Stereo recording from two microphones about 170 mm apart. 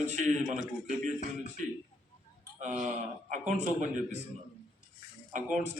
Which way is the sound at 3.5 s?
45° right (ahead or behind).